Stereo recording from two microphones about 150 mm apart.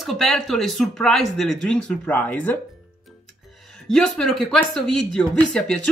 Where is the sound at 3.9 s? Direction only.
5° left (ahead or behind).